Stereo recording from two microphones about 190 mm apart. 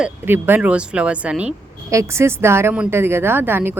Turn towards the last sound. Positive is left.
turn(degrees=-10)  # may be behind; listen again after turning